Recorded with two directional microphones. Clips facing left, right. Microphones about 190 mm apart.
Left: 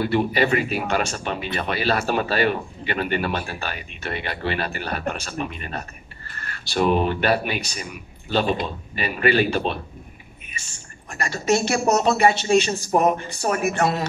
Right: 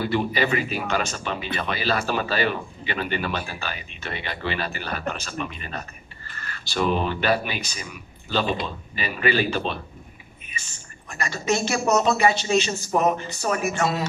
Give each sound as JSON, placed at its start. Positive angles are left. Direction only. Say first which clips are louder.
{"t": 0.0, "sound": "speech", "louder": "left 3 dB", "side_deg": 50}
{"t": 11.1, "sound": "speech", "louder": "left 3 dB", "side_deg": 55}
{"t": 11.8, "sound": "speech", "louder": "left 1 dB", "side_deg": 35}
{"t": 12.2, "sound": "speech", "louder": "left 3 dB", "side_deg": 55}
{"t": 12.9, "sound": "speech", "louder": "left 2 dB", "side_deg": 40}
{"t": 13.5, "sound": "speech", "louder": "left 2 dB", "side_deg": 55}